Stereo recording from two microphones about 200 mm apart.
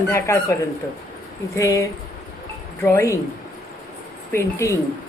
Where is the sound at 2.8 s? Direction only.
10° left (ahead or behind).